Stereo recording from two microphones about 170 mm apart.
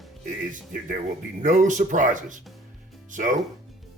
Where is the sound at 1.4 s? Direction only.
50° right (ahead or behind).